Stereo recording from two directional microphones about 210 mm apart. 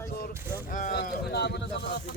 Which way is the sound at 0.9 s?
50° left (ahead or behind).